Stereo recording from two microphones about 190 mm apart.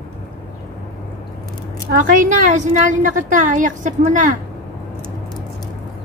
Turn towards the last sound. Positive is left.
turn(degrees=-40)  # may be behind; listen again after turning